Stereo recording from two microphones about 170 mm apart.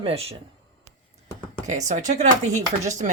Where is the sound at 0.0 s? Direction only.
35° right (ahead or behind).